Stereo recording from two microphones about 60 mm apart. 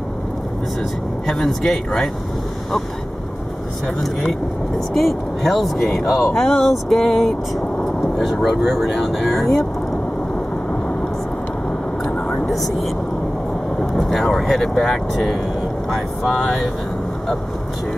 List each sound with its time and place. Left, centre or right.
1.2 s speech: centre
4.2 s speech: centre
12.0 s vehicle: centre
12.4 s speech: centre